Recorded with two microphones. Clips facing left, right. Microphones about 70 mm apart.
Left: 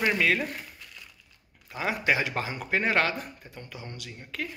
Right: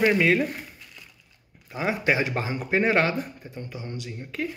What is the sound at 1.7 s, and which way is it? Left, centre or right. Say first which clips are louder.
Speech: right 3 dB; right.